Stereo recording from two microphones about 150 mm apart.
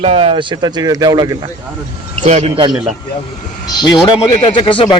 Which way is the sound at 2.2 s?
50° right (ahead or behind).